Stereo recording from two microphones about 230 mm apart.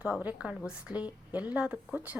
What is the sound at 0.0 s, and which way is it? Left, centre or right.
A woman's voice, centre.